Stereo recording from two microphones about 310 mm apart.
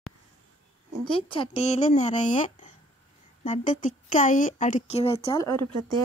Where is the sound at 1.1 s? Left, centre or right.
Centre.